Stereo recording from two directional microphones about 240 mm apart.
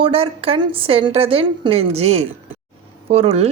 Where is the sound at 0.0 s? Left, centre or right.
Right.